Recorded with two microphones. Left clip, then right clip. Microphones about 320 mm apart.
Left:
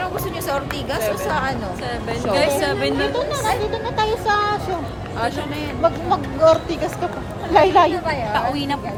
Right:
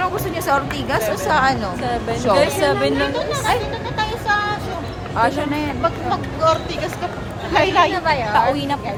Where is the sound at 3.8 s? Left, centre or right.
Left.